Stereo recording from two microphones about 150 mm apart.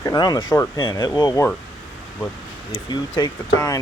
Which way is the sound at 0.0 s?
25° left (ahead or behind).